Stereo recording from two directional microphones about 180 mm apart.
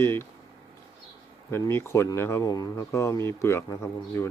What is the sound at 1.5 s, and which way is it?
Speech, 15° left (ahead or behind).